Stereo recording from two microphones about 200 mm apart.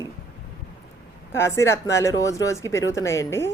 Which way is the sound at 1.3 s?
15° left (ahead or behind).